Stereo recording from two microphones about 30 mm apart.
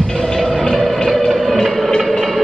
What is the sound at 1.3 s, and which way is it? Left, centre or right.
Music, centre.